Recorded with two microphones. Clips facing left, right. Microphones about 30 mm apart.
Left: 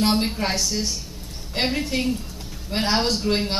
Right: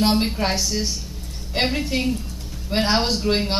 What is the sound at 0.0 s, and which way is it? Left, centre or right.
Speech, centre.